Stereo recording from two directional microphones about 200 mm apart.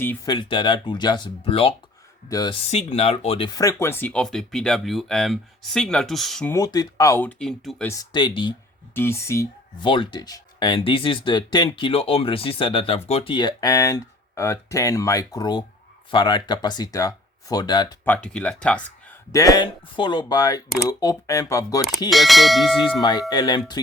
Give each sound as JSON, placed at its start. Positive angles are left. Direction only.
{"t": 0.3, "sound": "speech", "side_deg": 25}
{"t": 2.6, "sound": "speech", "side_deg": 30}
{"t": 6.5, "sound": "speech", "side_deg": 20}
{"t": 7.9, "sound": "speech", "side_deg": 20}
{"t": 9.0, "sound": "speech", "side_deg": 15}
{"t": 18.1, "sound": "speech", "side_deg": 5}
{"t": 19.3, "sound": "speech", "side_deg": 15}
{"t": 22.1, "sound": "speech", "side_deg": 0}
{"t": 23.0, "sound": "speech", "side_deg": 20}